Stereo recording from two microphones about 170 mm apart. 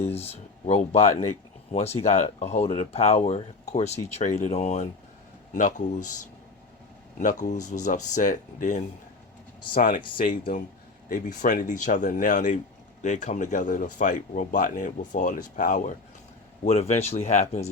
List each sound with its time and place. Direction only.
0.0 s speech: 35° left (ahead or behind)
7.2 s speech: 50° left (ahead or behind)
9.7 s speech: 55° left (ahead or behind); by 17.7 s 40° left (ahead or behind)